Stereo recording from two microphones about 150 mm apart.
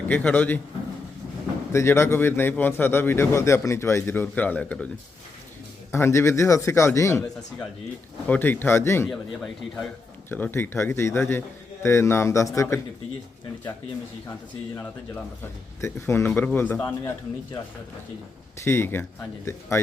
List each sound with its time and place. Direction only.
0.1 s speech: 10° left (ahead or behind)
1.7 s speech: 15° left (ahead or behind)
5.9 s a man's voice: 15° left (ahead or behind)
8.3 s speech: 15° left (ahead or behind)
9.0 s speech: centre (ahead or behind)
10.2 s speech: 15° left (ahead or behind)
15.8 s speech: 15° left (ahead or behind)
18.6 s a man's voice: 15° left (ahead or behind)